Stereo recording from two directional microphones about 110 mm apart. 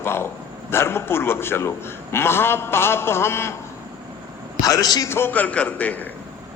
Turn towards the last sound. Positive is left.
turn(degrees=15)  # may be behind; listen again after turning